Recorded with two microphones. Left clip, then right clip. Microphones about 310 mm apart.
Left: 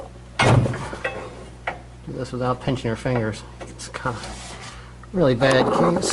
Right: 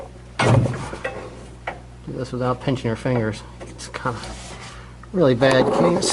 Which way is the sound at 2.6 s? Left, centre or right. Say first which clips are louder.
Right 1 dB; centre.